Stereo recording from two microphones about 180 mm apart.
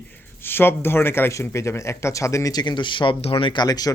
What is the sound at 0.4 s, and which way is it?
A man's voice, 10° left (ahead or behind).